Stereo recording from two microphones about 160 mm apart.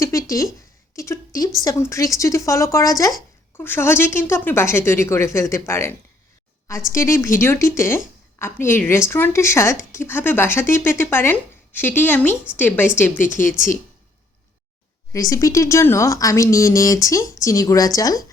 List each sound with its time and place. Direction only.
0.0 s a sound: 20° left (ahead or behind)
1.6 s a woman's voice: 20° left (ahead or behind)
15.1 s speech: 20° left (ahead or behind)